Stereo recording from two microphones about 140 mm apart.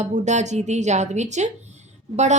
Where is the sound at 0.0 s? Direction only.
55° right (ahead or behind).